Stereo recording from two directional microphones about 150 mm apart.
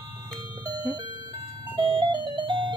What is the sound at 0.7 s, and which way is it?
Music, 25° right (ahead or behind).